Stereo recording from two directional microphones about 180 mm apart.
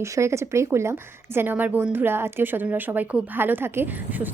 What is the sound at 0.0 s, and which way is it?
A woman's voice, 15° right (ahead or behind).